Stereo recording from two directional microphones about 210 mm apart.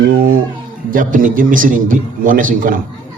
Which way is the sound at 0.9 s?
40° right (ahead or behind).